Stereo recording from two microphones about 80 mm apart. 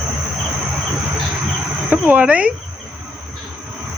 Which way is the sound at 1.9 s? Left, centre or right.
Right.